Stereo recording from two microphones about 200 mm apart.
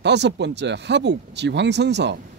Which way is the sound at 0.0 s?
60° right (ahead or behind).